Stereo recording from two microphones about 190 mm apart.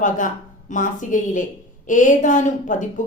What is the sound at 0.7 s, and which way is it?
A woman's voice, 40° left (ahead or behind).